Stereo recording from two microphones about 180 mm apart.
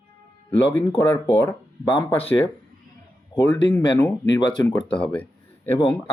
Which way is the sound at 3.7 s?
10° left (ahead or behind).